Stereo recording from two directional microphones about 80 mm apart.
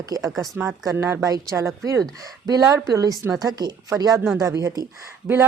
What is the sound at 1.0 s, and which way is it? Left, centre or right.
Speech, right.